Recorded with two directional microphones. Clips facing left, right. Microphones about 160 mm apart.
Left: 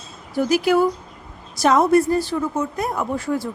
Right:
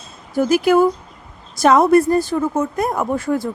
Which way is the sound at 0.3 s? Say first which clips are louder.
Right 3 dB; 50° right (ahead or behind).